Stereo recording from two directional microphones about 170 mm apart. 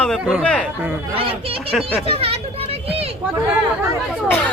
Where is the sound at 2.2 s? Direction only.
35° right (ahead or behind).